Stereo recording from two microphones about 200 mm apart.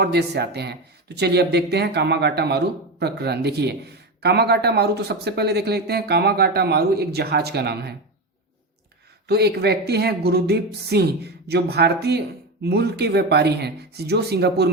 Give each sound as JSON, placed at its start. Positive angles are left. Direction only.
{"t": 0.0, "sound": "speech", "side_deg": -55}
{"t": 9.2, "sound": "speech", "side_deg": -55}